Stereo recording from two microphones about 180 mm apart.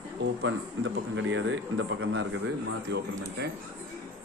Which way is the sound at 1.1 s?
90° right.